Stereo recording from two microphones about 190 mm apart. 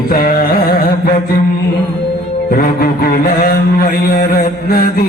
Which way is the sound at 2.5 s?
50° left (ahead or behind).